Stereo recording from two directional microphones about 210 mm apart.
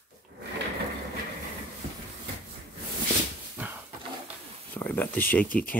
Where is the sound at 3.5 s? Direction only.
10° right (ahead or behind).